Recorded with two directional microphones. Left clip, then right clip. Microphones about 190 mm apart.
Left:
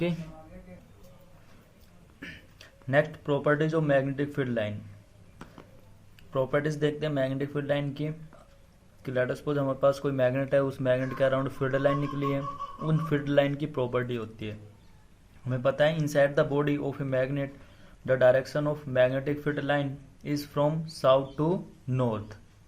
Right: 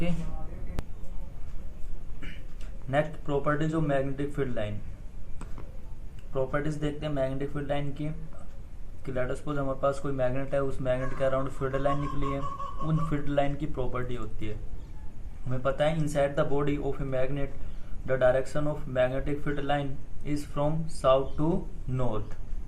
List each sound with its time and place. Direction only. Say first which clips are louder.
2.9 s speech: left 2 dB; 35° left (ahead or behind)
6.3 s speech: left 3 dB; 40° left (ahead or behind)